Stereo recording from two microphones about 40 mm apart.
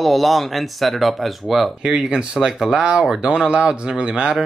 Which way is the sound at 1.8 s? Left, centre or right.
Centre.